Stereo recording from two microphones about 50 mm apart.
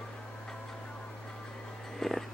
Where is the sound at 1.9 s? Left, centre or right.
Centre.